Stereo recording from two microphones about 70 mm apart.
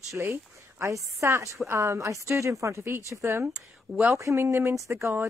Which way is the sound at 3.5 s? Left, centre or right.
Centre.